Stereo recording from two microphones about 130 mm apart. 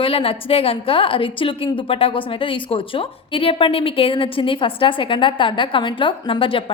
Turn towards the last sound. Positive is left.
turn(degrees=45)  # may be behind; listen again after turning